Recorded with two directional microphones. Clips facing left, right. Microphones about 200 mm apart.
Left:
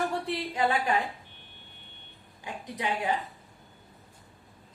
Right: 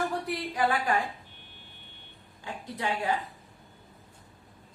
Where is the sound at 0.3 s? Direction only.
25° left (ahead or behind).